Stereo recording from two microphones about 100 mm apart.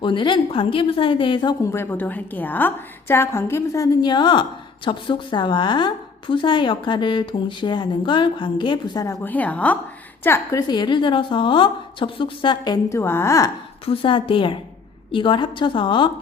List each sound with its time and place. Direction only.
0.0 s a woman's voice: 55° left (ahead or behind)
1.6 s a woman's voice: 25° left (ahead or behind)
4.1 s a woman's voice: 50° left (ahead or behind)
9.2 s a woman's voice: 15° left (ahead or behind)
10.7 s a woman's voice: 50° left (ahead or behind)
12.9 s a woman's voice: 25° left (ahead or behind)
13.8 s a woman's voice: 65° left (ahead or behind)